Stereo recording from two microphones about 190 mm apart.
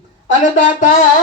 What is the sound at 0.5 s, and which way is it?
Speech, 40° left (ahead or behind).